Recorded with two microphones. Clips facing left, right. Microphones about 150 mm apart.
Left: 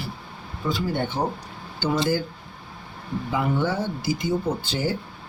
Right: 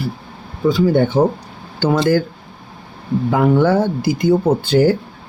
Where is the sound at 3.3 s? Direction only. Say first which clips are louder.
Right 10 dB; 90° right.